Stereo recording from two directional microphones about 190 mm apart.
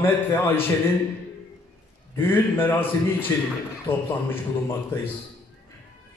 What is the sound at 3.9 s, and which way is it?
Speech, 30° left (ahead or behind).